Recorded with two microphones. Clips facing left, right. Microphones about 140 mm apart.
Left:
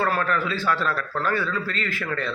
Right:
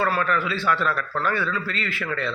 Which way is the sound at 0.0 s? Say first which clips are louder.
Even; 40° left (ahead or behind).